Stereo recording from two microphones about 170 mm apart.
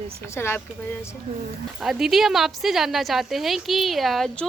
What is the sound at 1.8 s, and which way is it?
A woman's voice, centre (ahead or behind).